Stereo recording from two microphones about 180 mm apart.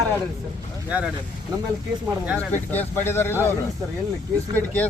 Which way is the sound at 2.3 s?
10° left (ahead or behind).